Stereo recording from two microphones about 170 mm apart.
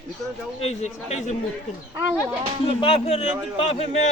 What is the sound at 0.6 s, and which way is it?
Speech, 40° left (ahead or behind).